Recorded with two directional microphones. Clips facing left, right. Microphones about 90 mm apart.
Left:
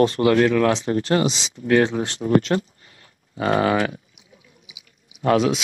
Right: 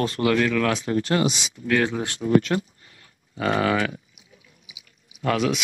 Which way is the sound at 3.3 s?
30° left (ahead or behind).